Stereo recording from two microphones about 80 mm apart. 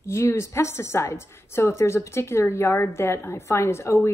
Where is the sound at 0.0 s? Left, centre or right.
Left.